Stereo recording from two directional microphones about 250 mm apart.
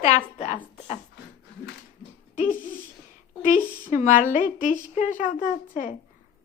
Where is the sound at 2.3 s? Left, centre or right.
Left.